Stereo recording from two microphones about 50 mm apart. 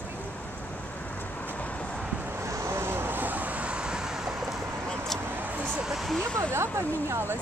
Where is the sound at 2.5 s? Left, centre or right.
Right; by 4.3 s centre.